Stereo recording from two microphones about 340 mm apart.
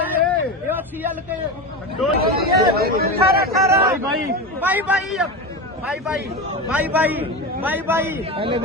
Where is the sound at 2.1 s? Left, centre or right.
Right.